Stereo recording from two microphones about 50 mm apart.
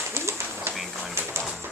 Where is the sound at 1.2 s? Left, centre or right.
Right.